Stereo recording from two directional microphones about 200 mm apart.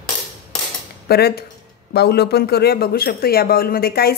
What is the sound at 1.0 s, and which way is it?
Speech, 55° left (ahead or behind).